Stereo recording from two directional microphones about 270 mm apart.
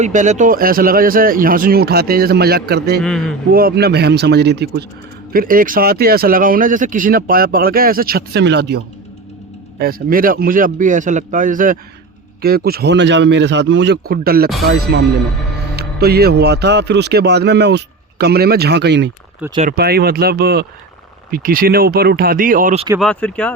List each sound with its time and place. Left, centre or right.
0.0 s speech: right
3.0 s speech: centre
3.5 s speech: right
15.7 s speech: right
23.0 s speech: centre